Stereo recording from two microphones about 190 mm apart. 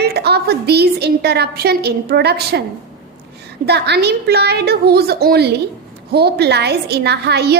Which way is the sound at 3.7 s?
60° right (ahead or behind).